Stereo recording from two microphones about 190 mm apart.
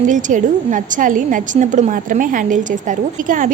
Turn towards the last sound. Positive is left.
turn(degrees=-45)  # may be behind; listen again after turning